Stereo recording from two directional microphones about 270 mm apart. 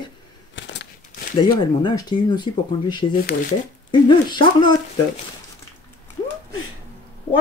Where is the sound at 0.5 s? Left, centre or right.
Left.